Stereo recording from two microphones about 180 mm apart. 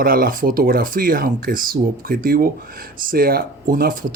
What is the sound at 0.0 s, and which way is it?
Speech, 55° right (ahead or behind).